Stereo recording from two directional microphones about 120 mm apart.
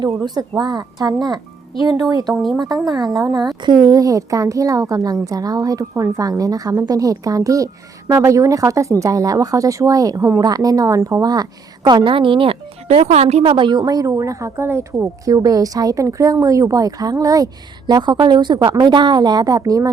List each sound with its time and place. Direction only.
0.2 s speech: 30° right (ahead or behind)
2.3 s speech: centre (ahead or behind)
2.8 s a child's voice: 35° right (ahead or behind); by 13.4 s 60° right (ahead or behind)
13.4 s a child's voice: 45° right (ahead or behind); by 15.3 s 20° right (ahead or behind)
15.3 s speech: 30° right (ahead or behind)